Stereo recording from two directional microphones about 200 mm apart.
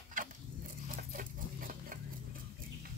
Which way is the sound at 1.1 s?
45° right (ahead or behind).